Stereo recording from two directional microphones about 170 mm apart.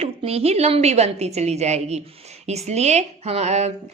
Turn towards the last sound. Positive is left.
turn(degrees=-40)  # may be behind; listen again after turning